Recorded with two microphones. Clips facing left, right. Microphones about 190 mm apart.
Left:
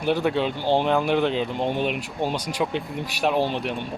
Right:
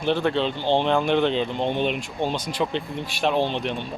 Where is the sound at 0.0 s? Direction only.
10° left (ahead or behind).